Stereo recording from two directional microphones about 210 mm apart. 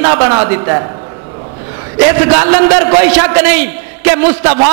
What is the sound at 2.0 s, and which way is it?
A man's voice, 20° right (ahead or behind).